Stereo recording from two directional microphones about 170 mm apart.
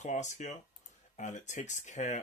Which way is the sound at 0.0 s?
45° left (ahead or behind).